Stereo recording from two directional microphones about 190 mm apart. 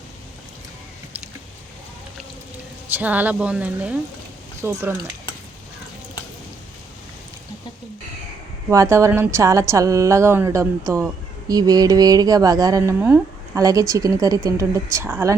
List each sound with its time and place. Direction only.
2.9 s a woman's voice: 10° right (ahead or behind)
8.7 s a woman's voice: 15° right (ahead or behind)